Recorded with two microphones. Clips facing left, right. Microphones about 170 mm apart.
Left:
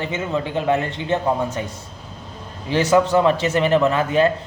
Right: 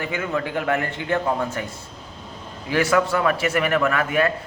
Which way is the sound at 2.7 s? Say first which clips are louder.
Left 3 dB; 25° left (ahead or behind).